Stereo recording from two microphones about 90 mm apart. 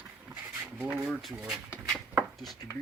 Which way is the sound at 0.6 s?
20° right (ahead or behind).